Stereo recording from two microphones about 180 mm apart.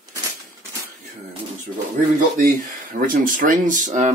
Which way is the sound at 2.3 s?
50° right (ahead or behind).